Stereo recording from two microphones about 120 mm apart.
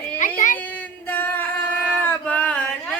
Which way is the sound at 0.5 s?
15° left (ahead or behind).